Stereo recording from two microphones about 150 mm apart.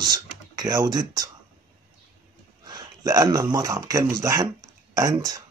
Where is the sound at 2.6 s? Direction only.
25° right (ahead or behind).